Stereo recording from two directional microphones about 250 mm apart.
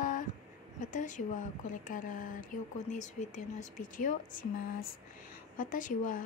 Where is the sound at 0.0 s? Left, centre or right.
Left.